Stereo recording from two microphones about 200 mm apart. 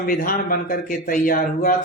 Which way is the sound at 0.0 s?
45° left (ahead or behind).